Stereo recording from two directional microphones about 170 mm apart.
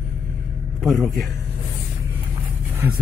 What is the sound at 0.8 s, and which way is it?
Speech, centre (ahead or behind).